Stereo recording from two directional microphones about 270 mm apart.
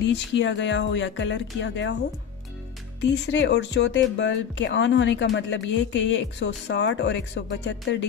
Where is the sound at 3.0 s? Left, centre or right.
Left.